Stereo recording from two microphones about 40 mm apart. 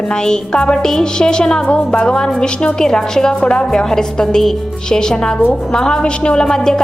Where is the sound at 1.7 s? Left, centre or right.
Left; by 3.3 s centre.